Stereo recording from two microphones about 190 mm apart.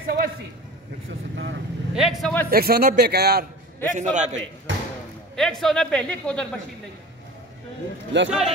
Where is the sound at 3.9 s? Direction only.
40° right (ahead or behind).